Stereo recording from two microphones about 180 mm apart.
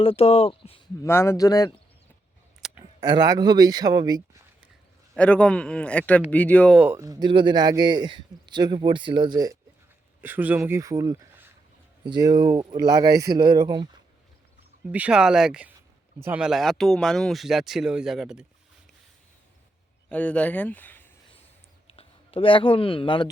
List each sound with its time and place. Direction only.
0.0 s speech: 30° left (ahead or behind)
1.0 s a man's voice: 15° left (ahead or behind)
2.6 s a sound: 5° right (ahead or behind)
3.0 s a man's voice: 25° right (ahead or behind)
5.1 s a man's voice: 5° left (ahead or behind)
6.7 s a man's voice: 10° right (ahead or behind)
10.2 s a man's voice: 10° right (ahead or behind)
12.0 s a man's voice: 25° right (ahead or behind)
14.8 s speech: 5° right (ahead or behind)
20.1 s speech: 5° left (ahead or behind)
21.9 s speech: 30° left (ahead or behind)